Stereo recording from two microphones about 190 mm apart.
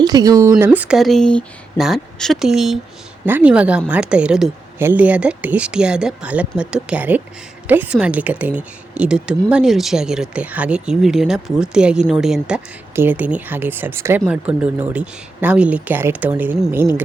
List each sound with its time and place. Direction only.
0.0 s a woman's voice: 20° right (ahead or behind)